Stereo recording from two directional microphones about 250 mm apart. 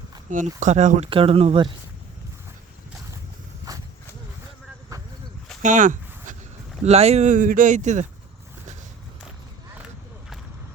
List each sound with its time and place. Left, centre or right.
0.3 s speech: right
3.7 s horse: centre
5.6 s a sound: right
6.8 s speech: right